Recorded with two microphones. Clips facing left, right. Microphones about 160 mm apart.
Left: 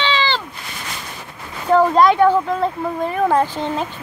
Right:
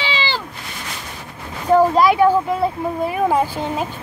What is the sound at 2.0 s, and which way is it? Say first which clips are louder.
A woman's voice: left 1 dB; 10° right (ahead or behind).